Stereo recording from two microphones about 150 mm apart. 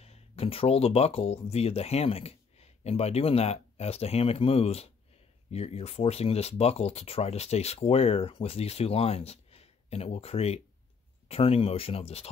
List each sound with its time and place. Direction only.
0.0 s speech: 40° left (ahead or behind)